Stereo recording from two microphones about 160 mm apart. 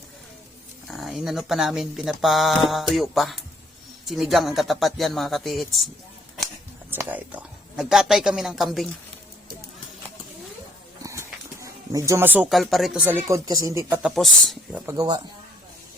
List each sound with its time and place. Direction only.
0.9 s speech: centre (ahead or behind)
6.9 s speech: 10° right (ahead or behind)
11.0 s dog: 20° right (ahead or behind)
12.5 s speech: centre (ahead or behind)
13.1 s speech: 15° right (ahead or behind)
14.0 s speech: centre (ahead or behind)
14.8 s speech: 25° right (ahead or behind)